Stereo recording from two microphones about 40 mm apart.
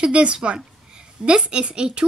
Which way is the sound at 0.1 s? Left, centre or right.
Right.